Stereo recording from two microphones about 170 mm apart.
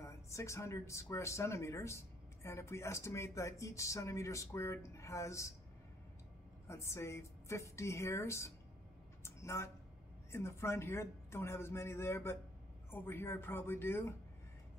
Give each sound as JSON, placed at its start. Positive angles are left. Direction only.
{"t": 0.0, "sound": "speech", "side_deg": 15}
{"t": 6.7, "sound": "speech", "side_deg": 15}
{"t": 9.2, "sound": "a sound", "side_deg": 15}
{"t": 10.3, "sound": "speech", "side_deg": 15}